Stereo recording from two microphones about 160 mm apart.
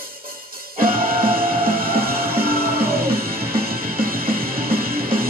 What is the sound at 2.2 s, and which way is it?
Music, 65° right (ahead or behind).